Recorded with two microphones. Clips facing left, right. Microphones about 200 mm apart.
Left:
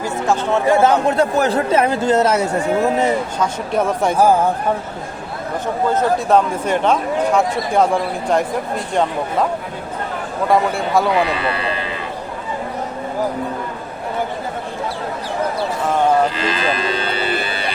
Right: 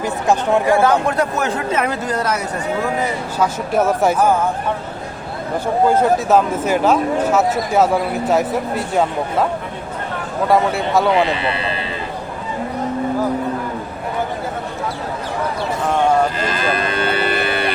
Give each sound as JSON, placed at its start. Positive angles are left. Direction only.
{"t": 0.0, "sound": "speech", "side_deg": -15}
{"t": 0.7, "sound": "speech", "side_deg": 20}
{"t": 3.3, "sound": "speech", "side_deg": -5}
{"t": 5.9, "sound": "speech", "side_deg": -5}
{"t": 10.5, "sound": "speech", "side_deg": 0}
{"t": 11.1, "sound": "speech", "side_deg": -25}
{"t": 16.4, "sound": "livestock", "side_deg": -50}